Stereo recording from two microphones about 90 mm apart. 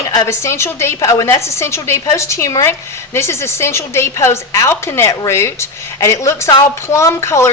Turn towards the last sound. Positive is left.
turn(degrees=30)  # may be behind; listen again after turning